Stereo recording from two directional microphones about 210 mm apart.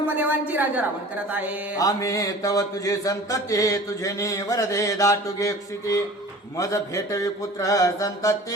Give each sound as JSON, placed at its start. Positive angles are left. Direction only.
{"t": 0.2, "sound": "a woman's voice", "side_deg": -10}
{"t": 1.8, "sound": "mantra", "side_deg": 15}